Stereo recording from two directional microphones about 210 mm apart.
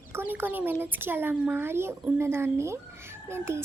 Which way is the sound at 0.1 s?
10° right (ahead or behind).